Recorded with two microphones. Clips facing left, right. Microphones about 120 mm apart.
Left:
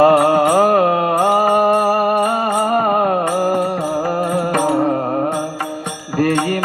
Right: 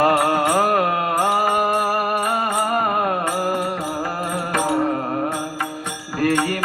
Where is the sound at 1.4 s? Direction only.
35° left (ahead or behind).